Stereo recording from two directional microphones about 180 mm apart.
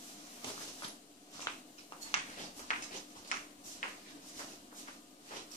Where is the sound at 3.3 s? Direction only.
45° left (ahead or behind).